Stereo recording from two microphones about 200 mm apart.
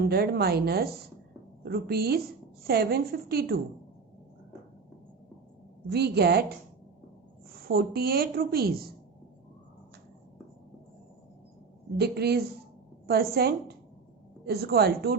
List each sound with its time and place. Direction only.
0.0 s a woman's voice: 50° right (ahead or behind)
5.9 s a woman's voice: 55° right (ahead or behind)
7.5 s a woman's voice: 50° right (ahead or behind)
11.9 s a woman's voice: 55° right (ahead or behind)